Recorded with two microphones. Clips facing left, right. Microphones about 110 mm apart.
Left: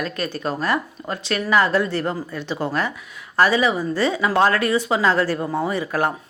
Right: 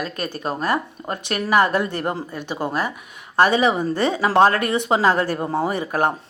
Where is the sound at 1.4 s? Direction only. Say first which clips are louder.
Right 1 dB; 20° right (ahead or behind).